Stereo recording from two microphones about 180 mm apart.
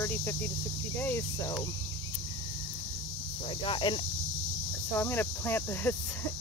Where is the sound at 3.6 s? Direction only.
25° left (ahead or behind).